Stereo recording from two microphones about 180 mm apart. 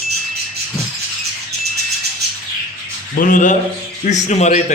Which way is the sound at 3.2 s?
45° left (ahead or behind).